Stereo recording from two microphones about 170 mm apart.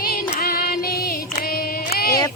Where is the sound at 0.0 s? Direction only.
60° left (ahead or behind).